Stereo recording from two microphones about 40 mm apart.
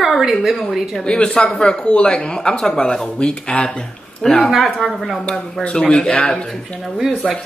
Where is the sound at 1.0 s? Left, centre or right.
Left.